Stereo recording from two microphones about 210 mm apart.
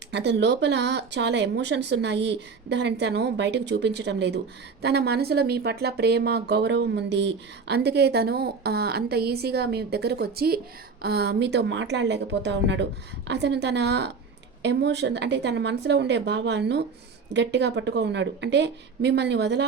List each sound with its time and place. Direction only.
0.1 s speech: 55° right (ahead or behind)